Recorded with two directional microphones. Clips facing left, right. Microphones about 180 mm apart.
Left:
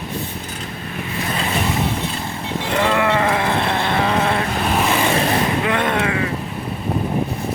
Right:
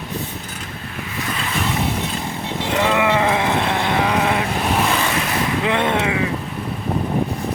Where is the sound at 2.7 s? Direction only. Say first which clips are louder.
Even; 10° right (ahead or behind).